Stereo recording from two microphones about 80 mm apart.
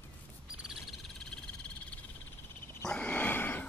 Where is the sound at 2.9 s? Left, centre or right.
Centre.